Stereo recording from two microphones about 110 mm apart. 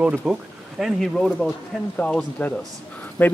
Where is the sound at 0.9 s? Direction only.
Centre (ahead or behind).